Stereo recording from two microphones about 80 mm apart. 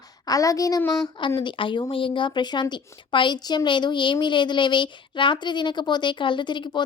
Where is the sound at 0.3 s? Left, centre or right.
Left.